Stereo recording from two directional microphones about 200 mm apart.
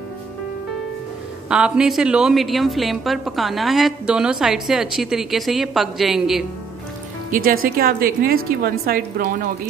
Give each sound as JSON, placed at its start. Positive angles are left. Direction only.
{"t": 1.5, "sound": "a woman's voice", "side_deg": -5}
{"t": 7.2, "sound": "speech", "side_deg": -45}